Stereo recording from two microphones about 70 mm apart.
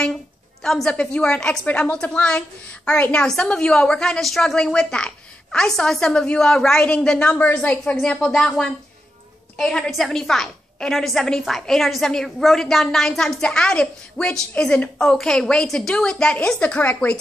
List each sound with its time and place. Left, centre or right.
0.6 s a woman's voice: centre